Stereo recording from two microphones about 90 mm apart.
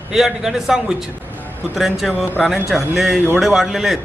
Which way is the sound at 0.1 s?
5° right (ahead or behind).